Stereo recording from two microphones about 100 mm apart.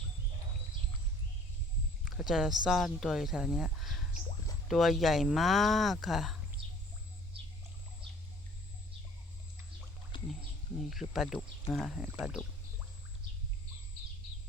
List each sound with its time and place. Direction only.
2.0 s speech: 5° right (ahead or behind)
10.1 s wild animals: 55° left (ahead or behind)
10.8 s speech: 5° right (ahead or behind)